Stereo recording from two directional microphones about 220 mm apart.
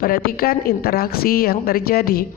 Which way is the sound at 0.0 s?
40° left (ahead or behind).